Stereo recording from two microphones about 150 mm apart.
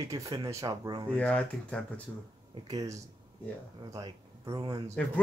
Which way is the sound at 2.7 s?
20° right (ahead or behind).